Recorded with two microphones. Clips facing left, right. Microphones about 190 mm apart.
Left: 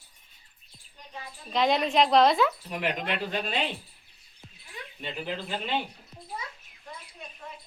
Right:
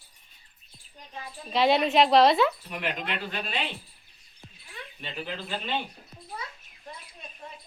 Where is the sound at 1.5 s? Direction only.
5° right (ahead or behind).